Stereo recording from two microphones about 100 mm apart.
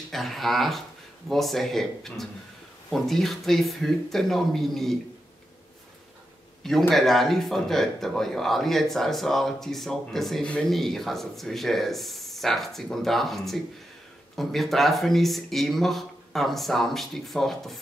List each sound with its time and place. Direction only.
0.1 s speech: centre (ahead or behind)
6.9 s speech: centre (ahead or behind)